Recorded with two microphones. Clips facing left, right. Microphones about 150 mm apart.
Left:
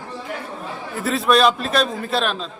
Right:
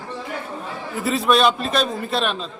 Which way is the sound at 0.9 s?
Centre (ahead or behind).